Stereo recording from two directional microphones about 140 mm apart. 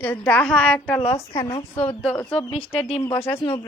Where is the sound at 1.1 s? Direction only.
25° left (ahead or behind).